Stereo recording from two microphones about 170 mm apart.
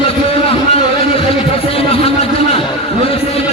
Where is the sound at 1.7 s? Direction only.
35° left (ahead or behind).